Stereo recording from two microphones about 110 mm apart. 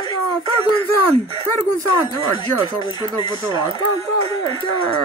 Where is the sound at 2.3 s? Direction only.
45° left (ahead or behind).